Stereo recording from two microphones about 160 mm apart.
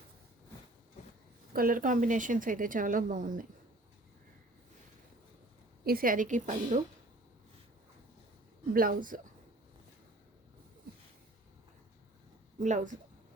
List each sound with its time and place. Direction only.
1.5 s a woman's voice: 60° right (ahead or behind)
5.8 s a woman's voice: 65° right (ahead or behind); by 6.8 s 45° right (ahead or behind)
8.7 s a woman's voice: 60° right (ahead or behind)
12.5 s speech: 50° right (ahead or behind)